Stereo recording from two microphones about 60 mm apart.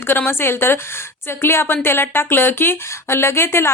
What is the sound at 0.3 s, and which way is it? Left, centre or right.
A woman's voice, left.